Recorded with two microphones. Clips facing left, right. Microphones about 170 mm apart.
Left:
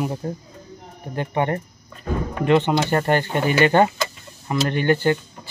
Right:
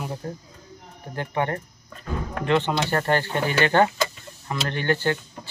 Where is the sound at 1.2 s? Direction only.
20° left (ahead or behind).